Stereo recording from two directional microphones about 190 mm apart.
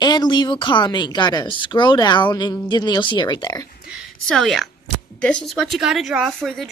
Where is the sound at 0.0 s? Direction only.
20° left (ahead or behind).